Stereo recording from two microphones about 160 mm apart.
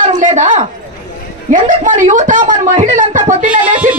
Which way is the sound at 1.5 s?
55° right (ahead or behind).